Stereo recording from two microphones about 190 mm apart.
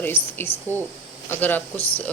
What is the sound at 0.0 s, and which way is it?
Speech, 10° left (ahead or behind).